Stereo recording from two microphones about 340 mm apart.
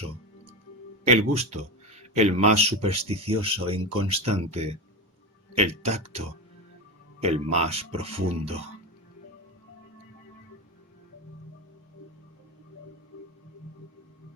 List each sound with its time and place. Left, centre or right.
1.0 s speech: centre